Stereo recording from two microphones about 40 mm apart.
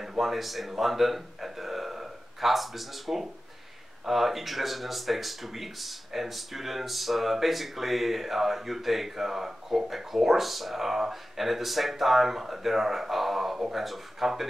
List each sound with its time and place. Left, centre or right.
0.2 s a man's voice: centre